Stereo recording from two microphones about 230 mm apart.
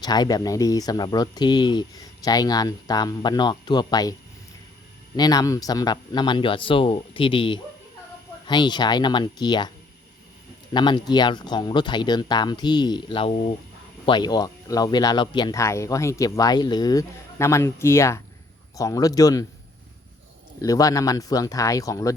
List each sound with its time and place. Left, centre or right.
0.0 s speech: centre
5.1 s speech: centre
10.8 s speech: centre
20.6 s speech: centre